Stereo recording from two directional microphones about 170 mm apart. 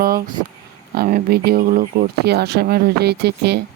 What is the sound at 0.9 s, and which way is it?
Speech, 60° right (ahead or behind).